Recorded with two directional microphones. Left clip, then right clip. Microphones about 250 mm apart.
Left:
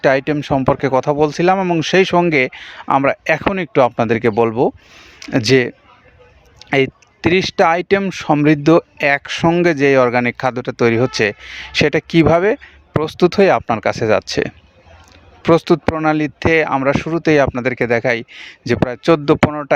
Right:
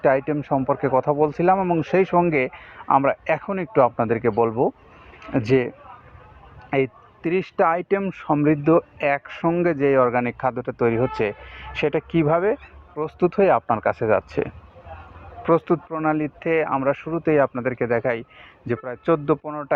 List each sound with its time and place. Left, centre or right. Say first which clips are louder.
0.0 s speech: left 5 dB; left